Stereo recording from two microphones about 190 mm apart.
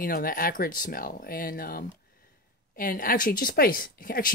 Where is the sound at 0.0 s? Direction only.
50° left (ahead or behind).